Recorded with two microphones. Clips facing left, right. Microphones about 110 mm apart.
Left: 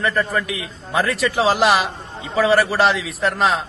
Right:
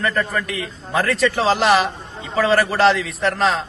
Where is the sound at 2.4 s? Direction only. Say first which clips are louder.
Left 1 dB; 5° left (ahead or behind).